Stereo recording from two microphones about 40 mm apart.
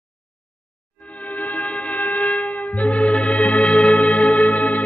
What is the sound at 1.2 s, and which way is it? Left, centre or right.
Music, left.